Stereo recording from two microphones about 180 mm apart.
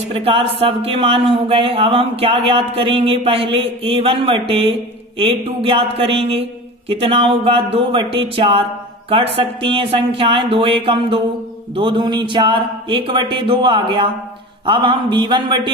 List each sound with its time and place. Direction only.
0.1 s speech: 30° right (ahead or behind)